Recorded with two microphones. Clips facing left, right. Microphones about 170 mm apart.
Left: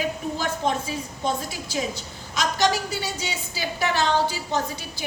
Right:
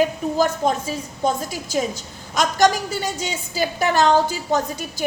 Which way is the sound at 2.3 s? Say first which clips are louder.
Right 5 dB; 50° right (ahead or behind).